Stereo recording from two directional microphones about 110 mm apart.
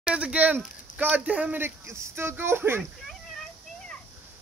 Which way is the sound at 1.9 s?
25° right (ahead or behind).